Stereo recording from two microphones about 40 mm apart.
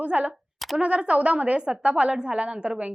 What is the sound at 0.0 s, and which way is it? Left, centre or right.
A woman's voice, right.